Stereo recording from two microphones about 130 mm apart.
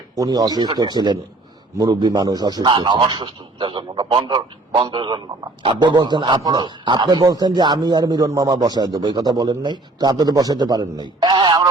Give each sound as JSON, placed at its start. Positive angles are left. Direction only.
{"t": 0.2, "sound": "a man's voice", "side_deg": -30}